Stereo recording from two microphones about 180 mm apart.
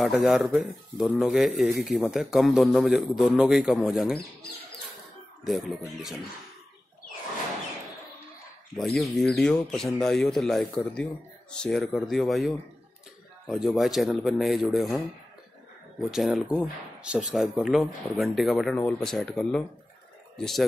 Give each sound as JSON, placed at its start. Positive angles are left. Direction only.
{"t": 0.0, "sound": "speech", "side_deg": 0}
{"t": 8.7, "sound": "speech", "side_deg": 0}
{"t": 13.7, "sound": "speech", "side_deg": 0}